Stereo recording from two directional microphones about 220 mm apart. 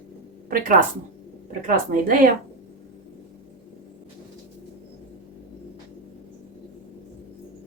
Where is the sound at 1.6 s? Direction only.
40° right (ahead or behind).